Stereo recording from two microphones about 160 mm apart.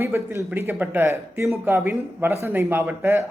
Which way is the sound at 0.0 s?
15° right (ahead or behind).